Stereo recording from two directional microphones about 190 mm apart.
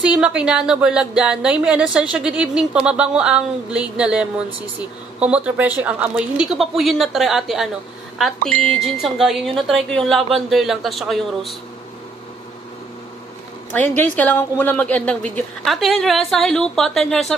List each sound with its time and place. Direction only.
0.0 s speech: 5° right (ahead or behind)
13.7 s speech: 10° left (ahead or behind)